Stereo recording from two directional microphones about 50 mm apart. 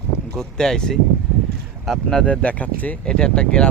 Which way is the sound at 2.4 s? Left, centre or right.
Left.